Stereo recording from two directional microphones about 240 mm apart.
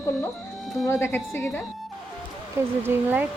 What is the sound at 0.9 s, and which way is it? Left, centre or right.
Speech, centre.